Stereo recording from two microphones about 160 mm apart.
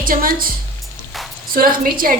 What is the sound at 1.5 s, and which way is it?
Speech, 65° right (ahead or behind).